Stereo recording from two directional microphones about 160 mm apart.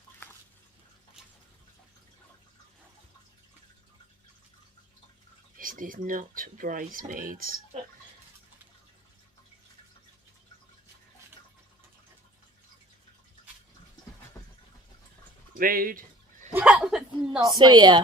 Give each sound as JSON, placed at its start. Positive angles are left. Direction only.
{"t": 5.5, "sound": "speech", "side_deg": -60}
{"t": 15.5, "sound": "a sound", "side_deg": -60}
{"t": 16.6, "sound": "a woman's voice", "side_deg": -5}
{"t": 17.4, "sound": "a woman's voice", "side_deg": -25}